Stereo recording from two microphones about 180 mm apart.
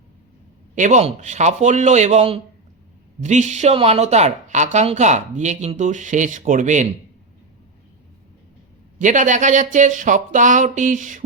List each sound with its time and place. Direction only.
0.8 s a woman's voice: 40° right (ahead or behind)
9.0 s speech: 45° right (ahead or behind)